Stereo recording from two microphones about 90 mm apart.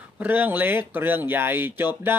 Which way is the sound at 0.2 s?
20° right (ahead or behind).